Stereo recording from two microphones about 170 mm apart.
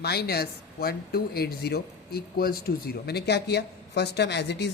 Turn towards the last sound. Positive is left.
turn(degrees=80)